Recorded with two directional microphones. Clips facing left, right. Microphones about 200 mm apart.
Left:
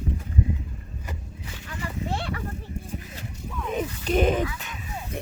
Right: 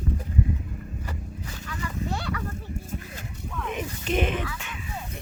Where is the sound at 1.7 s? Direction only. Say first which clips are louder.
Left 1 dB; 30° left (ahead or behind).